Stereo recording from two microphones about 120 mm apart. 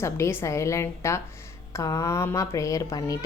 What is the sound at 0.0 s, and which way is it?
A woman's voice, 20° left (ahead or behind).